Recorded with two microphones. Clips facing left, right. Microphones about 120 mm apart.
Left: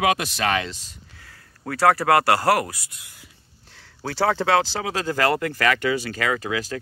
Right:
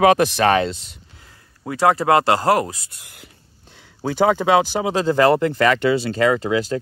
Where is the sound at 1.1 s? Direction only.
20° right (ahead or behind).